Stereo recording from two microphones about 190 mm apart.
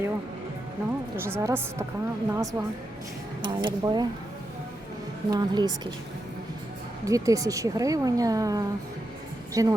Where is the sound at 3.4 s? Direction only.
25° right (ahead or behind).